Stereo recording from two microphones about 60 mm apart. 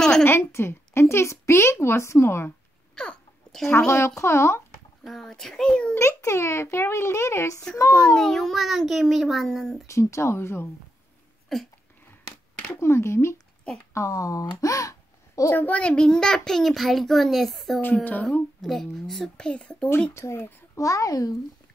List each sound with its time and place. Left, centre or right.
0.2 s a woman's voice: left
3.0 s a sound: centre
3.7 s a woman's voice: left
5.0 s a child's voice: centre
5.9 s a woman's voice: left
7.9 s a child's voice: centre
9.8 s a woman's voice: left
11.5 s a child's voice: centre
12.6 s a woman's voice: left
13.9 s speech: left
15.5 s a child's voice: left; by 19.3 s centre
19.3 s a child's voice: centre
20.2 s a woman's voice: left
20.7 s a child's voice: left